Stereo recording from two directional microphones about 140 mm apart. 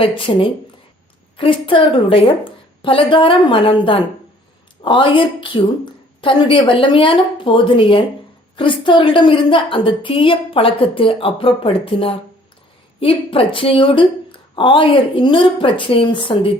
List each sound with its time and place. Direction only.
0.0 s a woman's voice: 40° left (ahead or behind)